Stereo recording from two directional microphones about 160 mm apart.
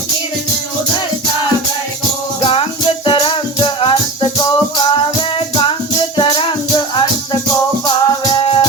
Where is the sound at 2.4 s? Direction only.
35° left (ahead or behind).